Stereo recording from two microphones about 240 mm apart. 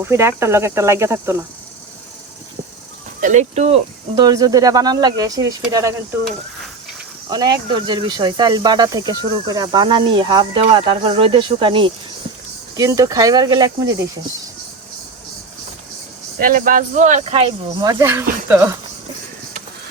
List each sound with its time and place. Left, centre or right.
0.0 s speech: centre
3.2 s speech: right; by 5.9 s centre
7.3 s speech: centre
16.4 s speech: right; by 18.7 s centre